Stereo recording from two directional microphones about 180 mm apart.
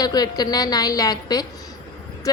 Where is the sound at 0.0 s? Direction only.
20° left (ahead or behind).